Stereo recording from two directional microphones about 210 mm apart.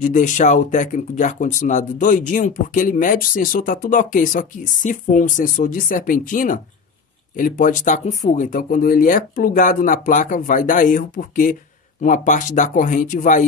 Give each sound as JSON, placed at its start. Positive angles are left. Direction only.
{"t": 0.0, "sound": "speech", "side_deg": 35}